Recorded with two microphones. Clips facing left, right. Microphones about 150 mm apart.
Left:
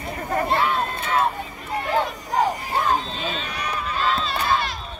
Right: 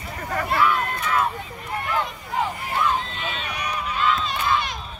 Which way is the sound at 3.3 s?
10° right (ahead or behind).